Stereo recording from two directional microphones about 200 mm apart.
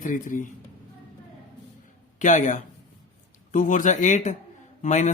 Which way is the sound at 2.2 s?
40° left (ahead or behind).